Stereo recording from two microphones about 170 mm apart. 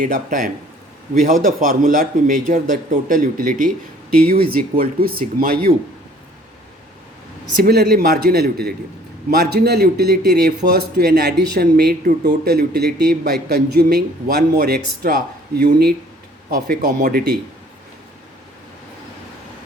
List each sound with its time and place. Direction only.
0.0 s a man's voice: 50° right (ahead or behind)
7.6 s speech: 70° right (ahead or behind)
16.5 s a man's voice: 55° right (ahead or behind)